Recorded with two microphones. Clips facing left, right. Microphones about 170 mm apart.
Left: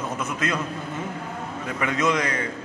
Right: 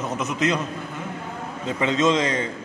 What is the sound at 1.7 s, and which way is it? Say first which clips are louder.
Speech: right 4 dB; 25° right (ahead or behind).